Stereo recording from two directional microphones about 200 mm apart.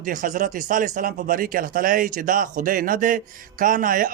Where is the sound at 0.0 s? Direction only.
40° right (ahead or behind).